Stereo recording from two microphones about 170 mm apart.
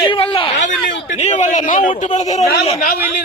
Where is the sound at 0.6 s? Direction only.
45° left (ahead or behind).